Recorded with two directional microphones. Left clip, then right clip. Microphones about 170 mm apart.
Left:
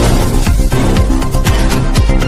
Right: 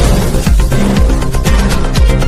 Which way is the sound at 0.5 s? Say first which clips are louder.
Even; centre (ahead or behind).